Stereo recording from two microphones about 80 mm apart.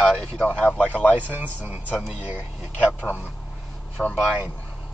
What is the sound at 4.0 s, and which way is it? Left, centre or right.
Speech, centre.